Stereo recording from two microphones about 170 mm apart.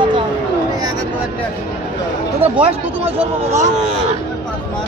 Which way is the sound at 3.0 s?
40° right (ahead or behind).